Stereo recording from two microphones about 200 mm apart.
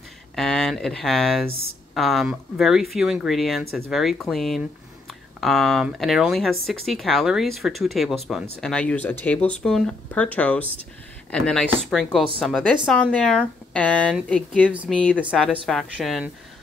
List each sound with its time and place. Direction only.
0.4 s speech: centre (ahead or behind)